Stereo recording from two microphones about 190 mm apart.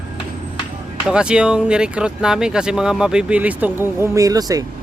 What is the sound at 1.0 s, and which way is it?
Speech, 5° right (ahead or behind).